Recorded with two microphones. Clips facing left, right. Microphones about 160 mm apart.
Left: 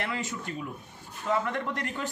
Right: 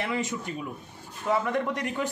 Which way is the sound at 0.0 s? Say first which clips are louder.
Right 4 dB; 15° right (ahead or behind).